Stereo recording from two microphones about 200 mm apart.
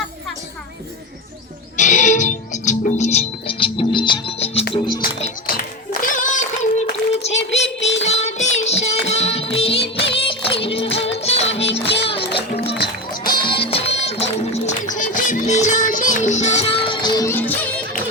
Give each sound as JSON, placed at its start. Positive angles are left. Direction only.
{"t": 1.7, "sound": "music", "side_deg": 40}
{"t": 5.5, "sound": "a sound", "side_deg": 45}
{"t": 7.5, "sound": "child singing", "side_deg": 30}
{"t": 8.0, "sound": "music", "side_deg": 35}
{"t": 11.7, "sound": "music", "side_deg": 60}
{"t": 12.0, "sound": "music", "side_deg": 25}
{"t": 12.6, "sound": "music", "side_deg": 55}
{"t": 13.4, "sound": "music", "side_deg": 25}